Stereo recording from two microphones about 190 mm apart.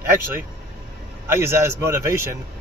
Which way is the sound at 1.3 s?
15° right (ahead or behind).